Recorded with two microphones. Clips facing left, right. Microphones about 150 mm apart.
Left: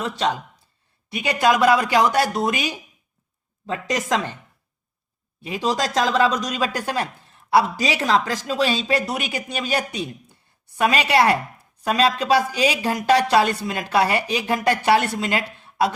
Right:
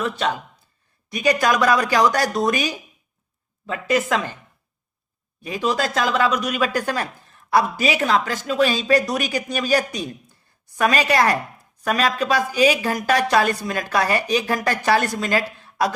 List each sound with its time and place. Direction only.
0.0 s a woman's voice: 30° left (ahead or behind)
5.4 s a woman's voice: 25° left (ahead or behind)